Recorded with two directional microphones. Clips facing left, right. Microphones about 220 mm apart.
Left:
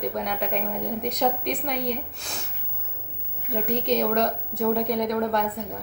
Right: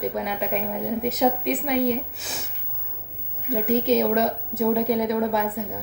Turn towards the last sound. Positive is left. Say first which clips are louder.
# right 1 dB
turn(degrees=-5)  # may be behind; listen again after turning